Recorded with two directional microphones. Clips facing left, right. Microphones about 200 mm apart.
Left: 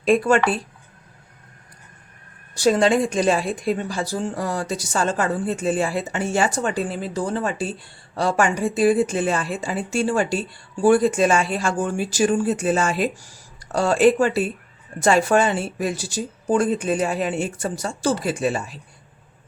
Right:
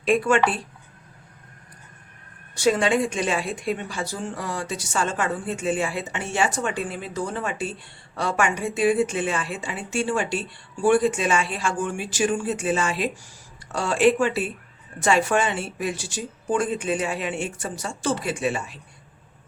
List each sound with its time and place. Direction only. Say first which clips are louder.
0.0 s speech: left 3 dB; 40° left (ahead or behind)
2.6 s speech: left 3 dB; 35° left (ahead or behind)